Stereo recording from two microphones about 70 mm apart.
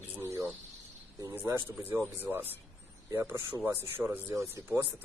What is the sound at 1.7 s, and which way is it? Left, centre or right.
Speech, right.